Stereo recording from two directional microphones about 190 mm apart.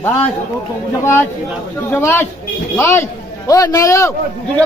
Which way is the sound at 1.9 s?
10° left (ahead or behind).